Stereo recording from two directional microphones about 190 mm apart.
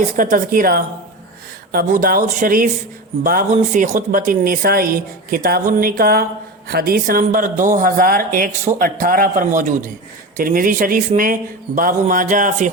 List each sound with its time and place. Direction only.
0.2 s speech: 45° right (ahead or behind)